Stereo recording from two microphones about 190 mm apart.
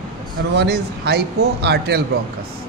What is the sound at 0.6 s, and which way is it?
Speech, 60° right (ahead or behind).